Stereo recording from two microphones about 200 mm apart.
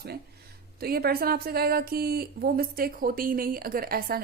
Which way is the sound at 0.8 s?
50° right (ahead or behind).